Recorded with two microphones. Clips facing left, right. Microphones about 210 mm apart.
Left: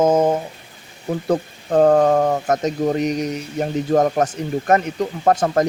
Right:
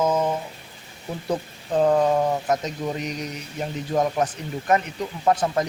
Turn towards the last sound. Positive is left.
turn(degrees=45)  # may be behind; listen again after turning